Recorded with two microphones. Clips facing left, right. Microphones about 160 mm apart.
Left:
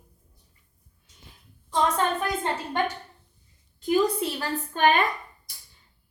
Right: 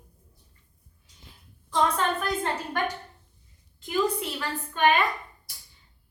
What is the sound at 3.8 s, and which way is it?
A woman's voice, 35° left (ahead or behind).